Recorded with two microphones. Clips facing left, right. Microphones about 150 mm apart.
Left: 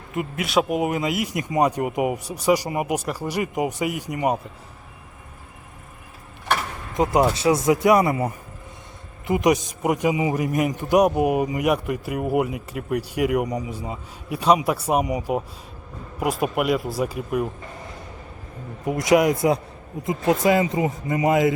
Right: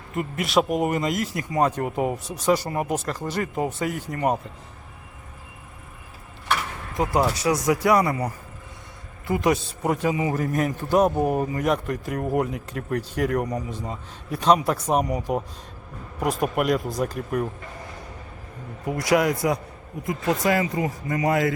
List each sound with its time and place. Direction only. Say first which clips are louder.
0.1 s a man's voice: even; centre (ahead or behind)
6.9 s a man's voice: left 3 dB; 20° left (ahead or behind)
18.9 s speech: left 3 dB; 20° left (ahead or behind)